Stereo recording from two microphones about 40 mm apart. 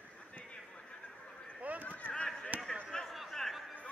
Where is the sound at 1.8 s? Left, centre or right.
Left.